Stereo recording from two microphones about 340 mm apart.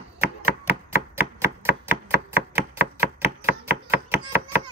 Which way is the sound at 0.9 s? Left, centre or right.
Centre.